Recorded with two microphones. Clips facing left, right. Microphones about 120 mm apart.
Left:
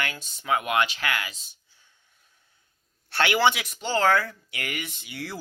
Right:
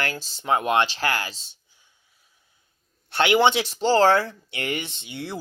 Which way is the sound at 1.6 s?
15° right (ahead or behind).